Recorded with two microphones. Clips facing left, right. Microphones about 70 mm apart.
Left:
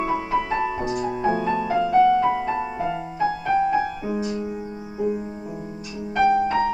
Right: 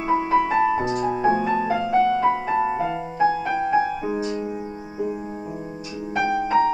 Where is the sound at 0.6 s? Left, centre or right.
Centre.